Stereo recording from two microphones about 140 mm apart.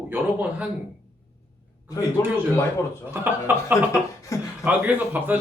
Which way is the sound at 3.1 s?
15° right (ahead or behind).